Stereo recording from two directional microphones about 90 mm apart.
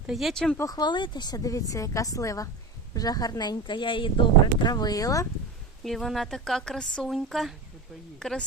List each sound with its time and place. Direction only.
0.1 s speech: centre (ahead or behind)
0.7 s a woman's voice: 55° left (ahead or behind)
4.7 s speech: 45° left (ahead or behind)
5.8 s speech: centre (ahead or behind)